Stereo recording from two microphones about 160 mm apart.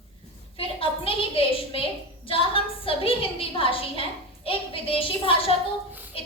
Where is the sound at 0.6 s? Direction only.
35° left (ahead or behind).